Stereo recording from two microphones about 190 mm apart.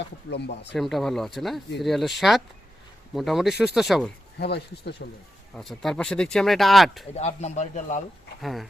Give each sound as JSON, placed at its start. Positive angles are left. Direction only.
{"t": 0.0, "sound": "speech", "side_deg": 65}
{"t": 0.7, "sound": "speech", "side_deg": 0}
{"t": 4.4, "sound": "speech", "side_deg": 60}
{"t": 5.5, "sound": "speech", "side_deg": 0}
{"t": 7.2, "sound": "a man's voice", "side_deg": 35}
{"t": 8.4, "sound": "speech", "side_deg": 0}